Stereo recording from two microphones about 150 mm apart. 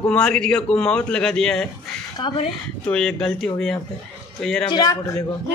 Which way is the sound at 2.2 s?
30° left (ahead or behind).